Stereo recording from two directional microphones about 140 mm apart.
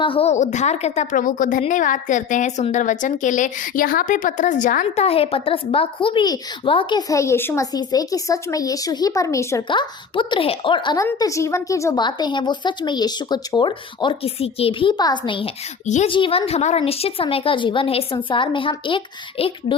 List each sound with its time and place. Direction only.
0.0 s a woman's voice: 40° left (ahead or behind); by 5.0 s 65° left (ahead or behind)
5.0 s speech: 45° left (ahead or behind)
7.1 s speech: 20° left (ahead or behind)
9.6 s speech: 35° left (ahead or behind)
11.0 s speech: 20° left (ahead or behind)
12.0 s speech: 30° left (ahead or behind)